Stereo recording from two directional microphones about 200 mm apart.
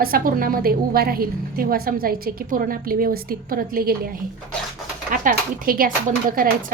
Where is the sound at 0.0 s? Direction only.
45° right (ahead or behind).